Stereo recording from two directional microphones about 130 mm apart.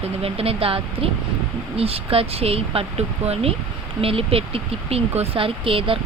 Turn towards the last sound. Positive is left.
turn(degrees=-45)  # may be behind; listen again after turning